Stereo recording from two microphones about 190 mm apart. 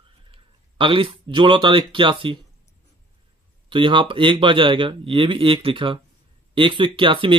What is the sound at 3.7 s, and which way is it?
Speech, 25° right (ahead or behind).